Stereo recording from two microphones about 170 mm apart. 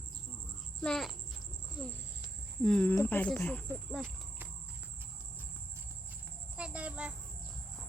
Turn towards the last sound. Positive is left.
turn(degrees=-5)  # may be behind; listen again after turning